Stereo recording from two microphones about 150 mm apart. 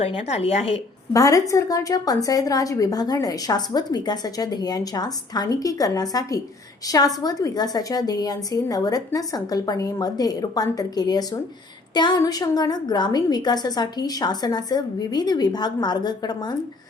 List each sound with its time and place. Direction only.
0.0 s speech: 45° left (ahead or behind)
1.1 s a woman's voice: 20° left (ahead or behind)